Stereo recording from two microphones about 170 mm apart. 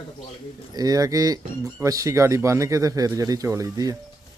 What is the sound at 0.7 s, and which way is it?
Speech, 20° right (ahead or behind).